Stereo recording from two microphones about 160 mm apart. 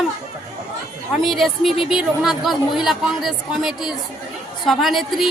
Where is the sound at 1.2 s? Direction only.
Centre (ahead or behind).